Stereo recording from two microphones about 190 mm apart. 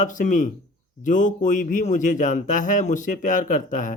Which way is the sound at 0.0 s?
40° left (ahead or behind).